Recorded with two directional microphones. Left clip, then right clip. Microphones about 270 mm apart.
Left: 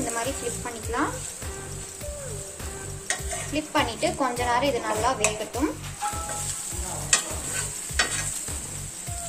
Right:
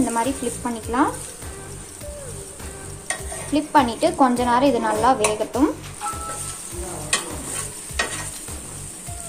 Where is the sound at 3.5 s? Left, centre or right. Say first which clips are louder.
Right 8 dB; right.